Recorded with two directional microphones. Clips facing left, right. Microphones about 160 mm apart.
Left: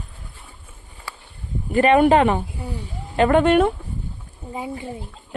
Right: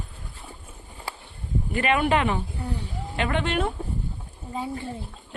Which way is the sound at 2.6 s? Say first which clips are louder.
Even; 10° left (ahead or behind).